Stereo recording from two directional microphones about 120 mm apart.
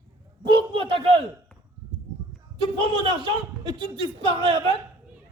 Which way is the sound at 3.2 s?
40° right (ahead or behind).